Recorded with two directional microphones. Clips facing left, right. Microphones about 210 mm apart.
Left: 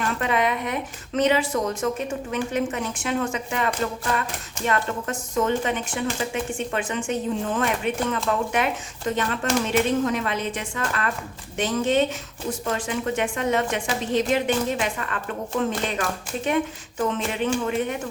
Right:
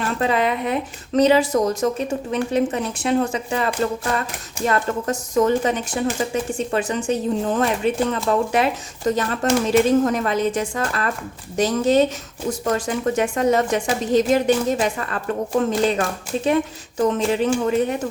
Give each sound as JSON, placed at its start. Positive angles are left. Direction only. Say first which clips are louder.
{"t": 0.2, "sound": "speech", "louder": "right 5 dB", "side_deg": -30}